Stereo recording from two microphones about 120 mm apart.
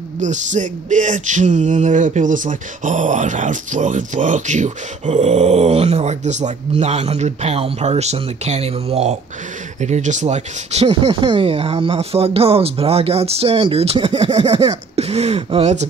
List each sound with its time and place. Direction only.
0.2 s speech: 90° right
6.7 s speech: 60° right (ahead or behind)
9.8 s speech: 80° right; by 14.2 s 45° right (ahead or behind)
15.0 s speech: 60° right (ahead or behind)